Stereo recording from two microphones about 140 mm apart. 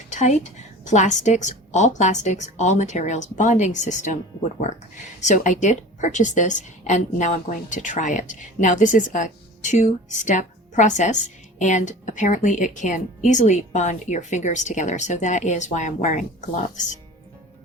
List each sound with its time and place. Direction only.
0.1 s a sound: 55° left (ahead or behind)
0.9 s a woman's voice: 55° left (ahead or behind)
5.2 s a woman's voice: 60° left (ahead or behind)